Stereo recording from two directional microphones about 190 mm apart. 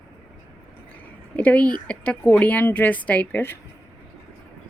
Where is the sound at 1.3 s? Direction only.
5° left (ahead or behind).